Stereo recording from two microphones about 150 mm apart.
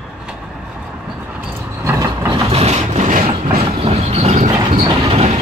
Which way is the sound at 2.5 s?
45° right (ahead or behind).